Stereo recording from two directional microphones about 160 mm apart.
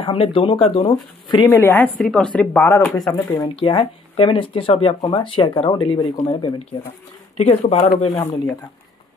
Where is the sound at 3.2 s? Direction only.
30° left (ahead or behind).